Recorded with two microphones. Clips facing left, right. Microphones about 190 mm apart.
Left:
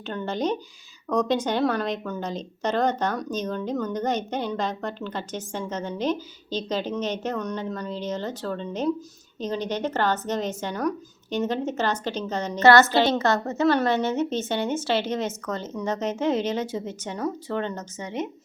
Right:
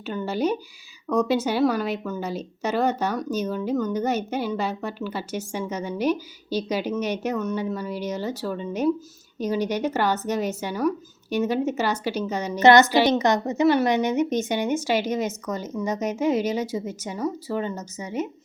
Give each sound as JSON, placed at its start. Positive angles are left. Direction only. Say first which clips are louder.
{"t": 0.0, "sound": "a woman's voice", "louder": "right 2 dB", "side_deg": -5}